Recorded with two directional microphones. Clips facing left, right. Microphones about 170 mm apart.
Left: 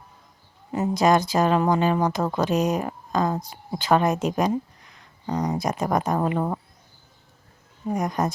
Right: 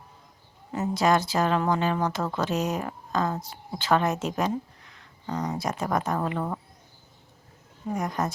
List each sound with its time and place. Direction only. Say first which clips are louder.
0.7 s speech: left 3 dB; 15° left (ahead or behind)
7.9 s speech: left 4 dB; 20° left (ahead or behind)